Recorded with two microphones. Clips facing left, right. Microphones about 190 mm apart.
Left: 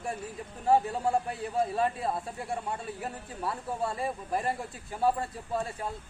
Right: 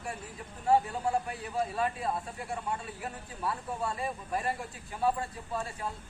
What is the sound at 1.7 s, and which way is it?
Speech, 30° left (ahead or behind).